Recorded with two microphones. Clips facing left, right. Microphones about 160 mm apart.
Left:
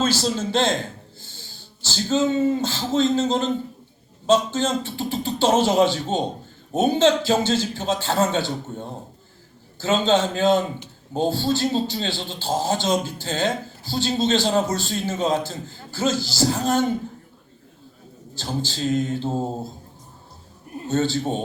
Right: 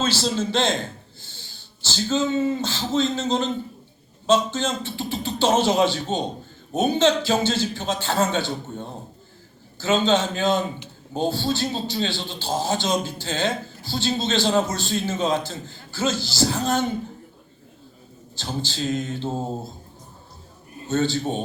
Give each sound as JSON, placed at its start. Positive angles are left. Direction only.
{"t": 0.0, "sound": "a man's voice", "side_deg": 45}
{"t": 18.3, "sound": "a man's voice", "side_deg": 40}
{"t": 20.9, "sound": "a man's voice", "side_deg": 40}